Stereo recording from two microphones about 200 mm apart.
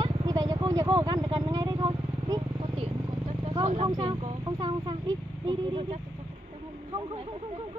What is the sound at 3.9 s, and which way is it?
Speech, 15° right (ahead or behind).